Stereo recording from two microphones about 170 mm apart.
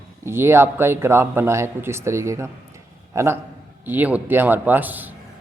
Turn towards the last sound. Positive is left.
turn(degrees=-10)  # may be behind; listen again after turning